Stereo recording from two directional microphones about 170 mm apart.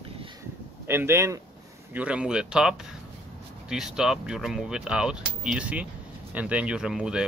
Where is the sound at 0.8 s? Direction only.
15° right (ahead or behind).